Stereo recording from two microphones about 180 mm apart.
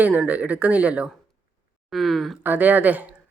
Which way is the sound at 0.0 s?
5° right (ahead or behind).